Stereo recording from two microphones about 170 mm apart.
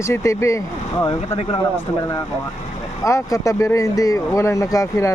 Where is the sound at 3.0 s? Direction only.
20° left (ahead or behind).